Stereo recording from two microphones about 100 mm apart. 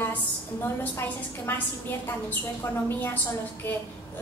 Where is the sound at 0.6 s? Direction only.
25° left (ahead or behind).